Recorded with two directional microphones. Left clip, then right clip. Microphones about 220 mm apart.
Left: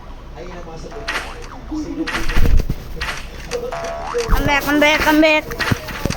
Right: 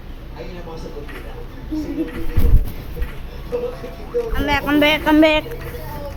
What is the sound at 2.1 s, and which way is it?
Speech, 40° left (ahead or behind).